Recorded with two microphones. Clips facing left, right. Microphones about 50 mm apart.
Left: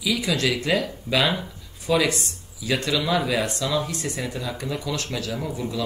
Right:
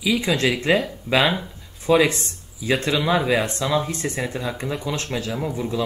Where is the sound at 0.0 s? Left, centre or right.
Right.